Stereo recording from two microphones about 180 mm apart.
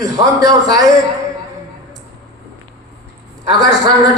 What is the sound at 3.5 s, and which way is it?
Speech, 20° right (ahead or behind).